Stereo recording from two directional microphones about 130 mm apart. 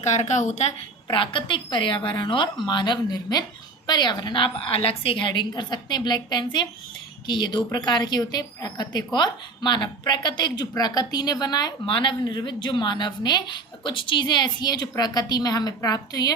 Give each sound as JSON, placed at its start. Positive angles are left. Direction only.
{"t": 0.0, "sound": "a woman's voice", "side_deg": 65}
{"t": 1.1, "sound": "a woman's voice", "side_deg": 40}